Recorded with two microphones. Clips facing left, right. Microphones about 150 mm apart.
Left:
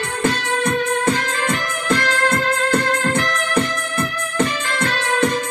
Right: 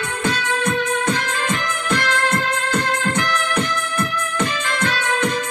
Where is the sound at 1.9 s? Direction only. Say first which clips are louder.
Left 2 dB; 35° left (ahead or behind).